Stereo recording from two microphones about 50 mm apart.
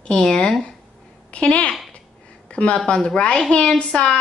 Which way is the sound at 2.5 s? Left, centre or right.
Left.